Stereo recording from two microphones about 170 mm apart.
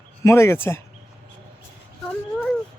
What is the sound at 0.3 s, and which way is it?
Speech, 15° left (ahead or behind).